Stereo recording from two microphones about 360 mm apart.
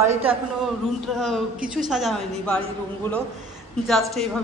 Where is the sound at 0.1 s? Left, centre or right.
Centre.